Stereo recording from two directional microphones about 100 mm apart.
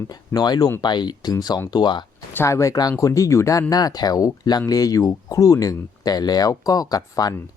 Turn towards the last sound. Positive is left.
turn(degrees=40)  # may be behind; listen again after turning